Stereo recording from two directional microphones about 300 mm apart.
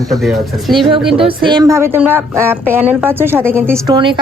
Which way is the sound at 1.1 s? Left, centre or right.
Centre.